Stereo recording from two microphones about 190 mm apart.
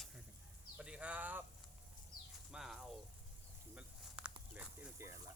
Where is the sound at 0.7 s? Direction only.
5° right (ahead or behind).